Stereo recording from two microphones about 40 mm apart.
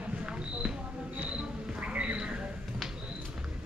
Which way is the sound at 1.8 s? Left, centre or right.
Right.